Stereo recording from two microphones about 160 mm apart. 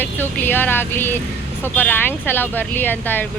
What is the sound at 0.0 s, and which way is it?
Speech, 10° left (ahead or behind).